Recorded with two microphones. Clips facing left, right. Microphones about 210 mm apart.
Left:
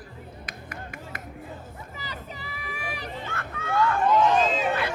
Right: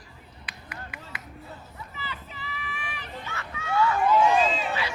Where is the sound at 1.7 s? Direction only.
40° left (ahead or behind).